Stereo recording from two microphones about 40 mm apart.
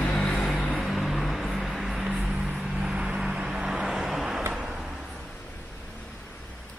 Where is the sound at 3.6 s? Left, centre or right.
Centre.